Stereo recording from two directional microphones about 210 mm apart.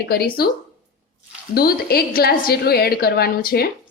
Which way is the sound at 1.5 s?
45° left (ahead or behind).